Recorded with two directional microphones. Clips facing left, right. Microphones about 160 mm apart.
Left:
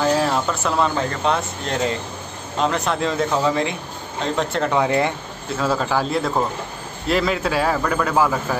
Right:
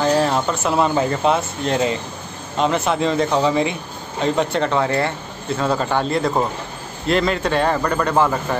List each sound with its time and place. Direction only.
0.0 s speech: centre (ahead or behind)
4.7 s speech: 15° left (ahead or behind)
5.6 s speech: centre (ahead or behind)